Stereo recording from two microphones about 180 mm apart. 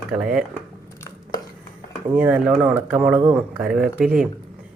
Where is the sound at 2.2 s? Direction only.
5° right (ahead or behind).